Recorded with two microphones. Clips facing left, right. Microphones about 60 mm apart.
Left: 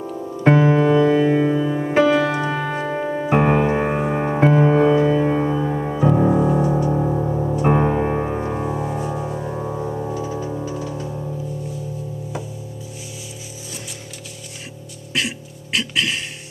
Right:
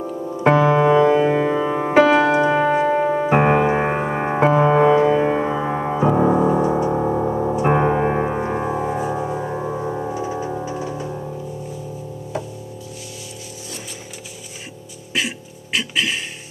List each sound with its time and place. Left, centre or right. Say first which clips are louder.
0.7 s music: right 1 dB; right
2.0 s music: right 3 dB; right
5.9 s music: right 1 dB; right
15.1 s music: even; centre